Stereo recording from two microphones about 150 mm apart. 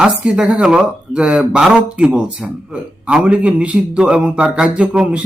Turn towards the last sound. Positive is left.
turn(degrees=-5)  # may be behind; listen again after turning